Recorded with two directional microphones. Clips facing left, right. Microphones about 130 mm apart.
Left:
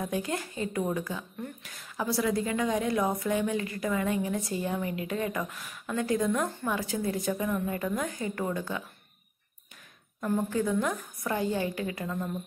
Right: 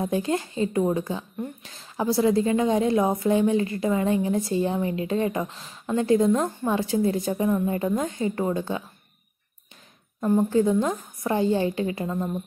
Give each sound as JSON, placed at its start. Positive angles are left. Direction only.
{"t": 0.0, "sound": "a woman's voice", "side_deg": -25}
{"t": 10.2, "sound": "a woman's voice", "side_deg": -25}